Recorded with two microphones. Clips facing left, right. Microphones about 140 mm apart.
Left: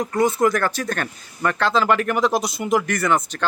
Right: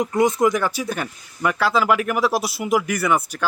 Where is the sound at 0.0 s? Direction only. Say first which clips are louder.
Right 1 dB; 20° right (ahead or behind).